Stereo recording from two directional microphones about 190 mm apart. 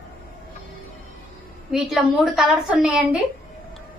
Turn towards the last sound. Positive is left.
turn(degrees=-5)  # may be behind; listen again after turning